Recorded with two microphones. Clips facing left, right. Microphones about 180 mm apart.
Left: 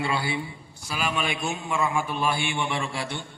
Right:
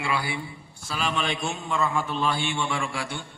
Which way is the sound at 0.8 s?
10° left (ahead or behind).